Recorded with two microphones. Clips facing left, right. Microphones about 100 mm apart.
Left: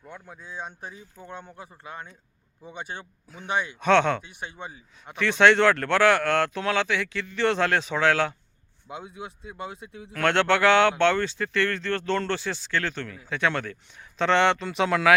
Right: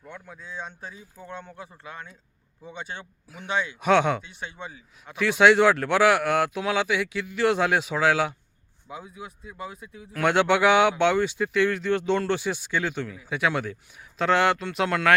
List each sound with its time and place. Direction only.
0.1 s speech: 15° left (ahead or behind)
3.4 s speech: 15° left (ahead or behind)
3.8 s speech: 10° right (ahead or behind)
4.3 s speech: 15° left (ahead or behind)
5.1 s speech: 5° right (ahead or behind)
9.5 s speech: 25° left (ahead or behind)
10.1 s speech: 10° right (ahead or behind)